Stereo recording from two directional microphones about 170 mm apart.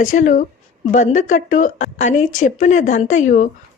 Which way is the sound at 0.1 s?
50° left (ahead or behind).